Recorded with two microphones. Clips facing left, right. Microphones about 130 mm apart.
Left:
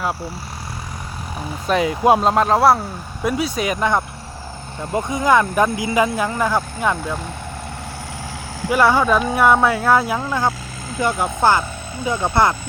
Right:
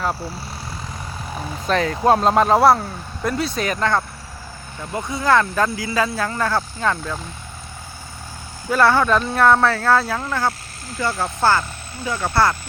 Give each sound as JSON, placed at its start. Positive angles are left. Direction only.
{"t": 1.6, "sound": "speech", "side_deg": 10}
{"t": 2.3, "sound": "speech", "side_deg": 0}
{"t": 8.7, "sound": "speech", "side_deg": 10}